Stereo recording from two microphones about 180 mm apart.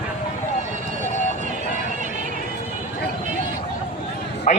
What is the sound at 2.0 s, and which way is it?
Music, 45° right (ahead or behind).